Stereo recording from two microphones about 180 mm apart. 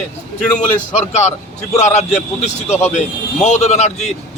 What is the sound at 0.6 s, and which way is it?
A man's voice, 40° left (ahead or behind).